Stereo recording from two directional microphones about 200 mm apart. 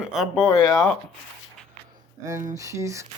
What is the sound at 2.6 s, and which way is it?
Speech, 15° right (ahead or behind).